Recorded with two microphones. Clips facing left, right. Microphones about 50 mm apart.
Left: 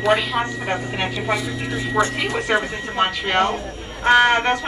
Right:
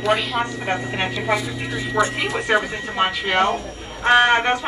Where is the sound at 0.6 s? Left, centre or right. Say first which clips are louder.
Even; centre.